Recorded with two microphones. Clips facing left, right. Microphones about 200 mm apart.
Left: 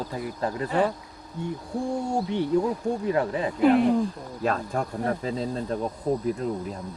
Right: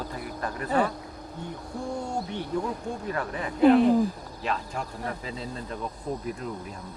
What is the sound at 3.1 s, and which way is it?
Speech, 20° left (ahead or behind).